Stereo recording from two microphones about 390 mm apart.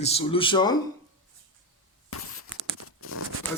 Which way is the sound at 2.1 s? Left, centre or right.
Left.